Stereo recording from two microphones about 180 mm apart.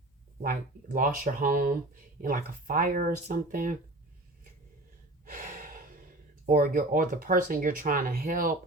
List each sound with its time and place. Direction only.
0.9 s speech: 50° right (ahead or behind)
5.2 s speech: 50° right (ahead or behind)